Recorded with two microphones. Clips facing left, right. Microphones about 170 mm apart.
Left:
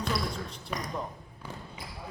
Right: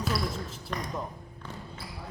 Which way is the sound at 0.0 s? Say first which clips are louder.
Right 1 dB; 5° right (ahead or behind).